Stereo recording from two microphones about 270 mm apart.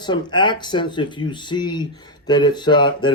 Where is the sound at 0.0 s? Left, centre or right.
Centre.